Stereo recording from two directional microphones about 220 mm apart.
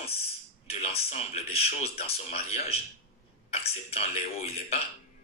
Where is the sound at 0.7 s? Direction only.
30° left (ahead or behind).